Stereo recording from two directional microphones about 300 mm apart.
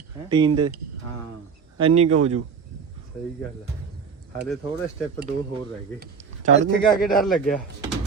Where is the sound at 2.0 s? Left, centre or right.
Right.